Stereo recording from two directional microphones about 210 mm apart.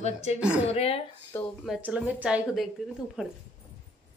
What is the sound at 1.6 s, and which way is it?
A woman's voice, 5° right (ahead or behind).